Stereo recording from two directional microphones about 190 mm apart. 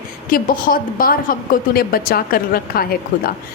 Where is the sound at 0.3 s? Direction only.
50° left (ahead or behind).